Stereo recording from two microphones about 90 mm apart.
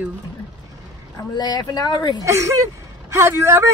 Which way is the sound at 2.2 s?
35° right (ahead or behind).